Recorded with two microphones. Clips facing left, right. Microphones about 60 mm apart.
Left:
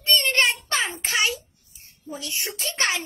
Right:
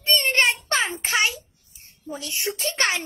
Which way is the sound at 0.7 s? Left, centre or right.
Right.